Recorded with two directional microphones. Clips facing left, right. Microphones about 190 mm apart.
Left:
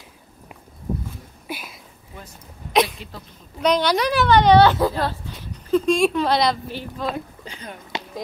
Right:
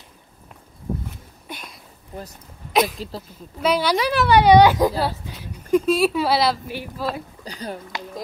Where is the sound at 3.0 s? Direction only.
35° right (ahead or behind).